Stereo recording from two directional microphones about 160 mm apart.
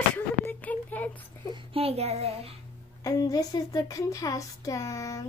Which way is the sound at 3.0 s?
25° left (ahead or behind).